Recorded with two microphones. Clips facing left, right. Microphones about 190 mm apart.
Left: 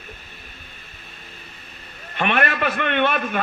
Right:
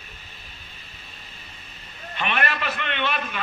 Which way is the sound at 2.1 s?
55° left (ahead or behind).